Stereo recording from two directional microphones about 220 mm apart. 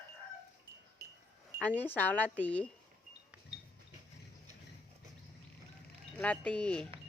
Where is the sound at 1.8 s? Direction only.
10° left (ahead or behind).